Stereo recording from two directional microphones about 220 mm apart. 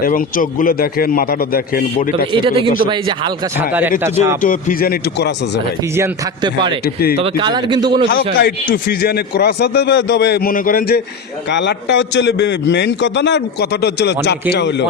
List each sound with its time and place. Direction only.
0.0 s a man's voice: 40° left (ahead or behind)
2.3 s speech: 25° right (ahead or behind)
3.7 s speech: 10° right (ahead or behind)
4.4 s a man's voice: 40° left (ahead or behind)
6.0 s speech: 20° right (ahead or behind)
6.8 s a man's voice: 45° left (ahead or behind)
7.2 s speech: 20° right (ahead or behind)
8.7 s a man's voice: 45° left (ahead or behind)
11.5 s a man's voice: 55° left (ahead or behind)